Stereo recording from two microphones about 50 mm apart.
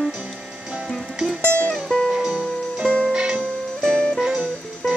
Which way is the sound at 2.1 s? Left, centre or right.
Centre.